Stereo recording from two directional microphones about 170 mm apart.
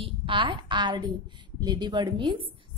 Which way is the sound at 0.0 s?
30° right (ahead or behind).